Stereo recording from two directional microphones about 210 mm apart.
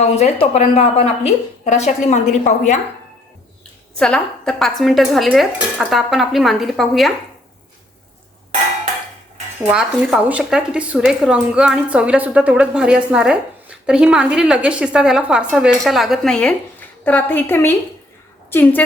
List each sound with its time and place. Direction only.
0.0 s a woman's voice: 30° left (ahead or behind)
3.9 s speech: 5° left (ahead or behind)
9.6 s a woman's voice: 5° right (ahead or behind)